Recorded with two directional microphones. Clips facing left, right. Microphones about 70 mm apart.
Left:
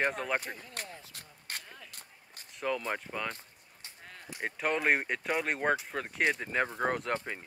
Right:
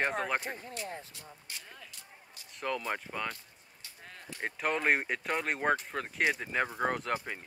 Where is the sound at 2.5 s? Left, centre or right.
Centre.